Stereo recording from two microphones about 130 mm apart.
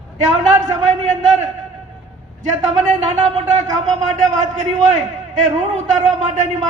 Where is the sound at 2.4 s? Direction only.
65° right (ahead or behind).